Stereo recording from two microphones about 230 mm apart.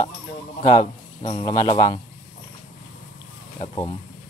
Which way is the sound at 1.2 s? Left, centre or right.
Centre.